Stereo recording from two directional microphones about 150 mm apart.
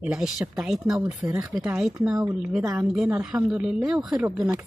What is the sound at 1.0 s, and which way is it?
Speech, 20° right (ahead or behind).